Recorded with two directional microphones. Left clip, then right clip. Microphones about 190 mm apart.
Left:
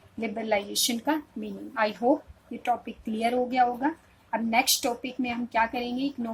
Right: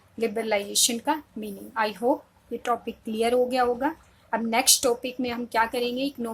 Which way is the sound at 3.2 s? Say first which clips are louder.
Right 2 dB; 20° right (ahead or behind).